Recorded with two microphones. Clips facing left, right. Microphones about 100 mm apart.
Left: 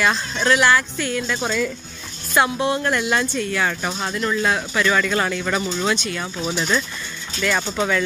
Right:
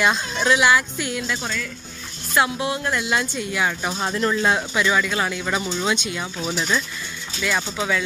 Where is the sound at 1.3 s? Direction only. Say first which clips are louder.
Left 7 dB; 15° left (ahead or behind).